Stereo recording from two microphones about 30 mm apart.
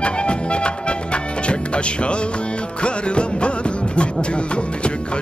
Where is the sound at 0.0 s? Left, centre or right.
Left.